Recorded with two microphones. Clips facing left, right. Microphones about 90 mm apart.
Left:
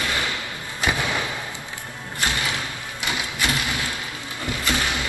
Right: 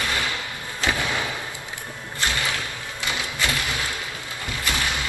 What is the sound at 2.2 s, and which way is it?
Music, 20° left (ahead or behind).